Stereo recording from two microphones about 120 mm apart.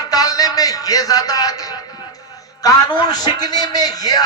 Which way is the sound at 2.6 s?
35° left (ahead or behind).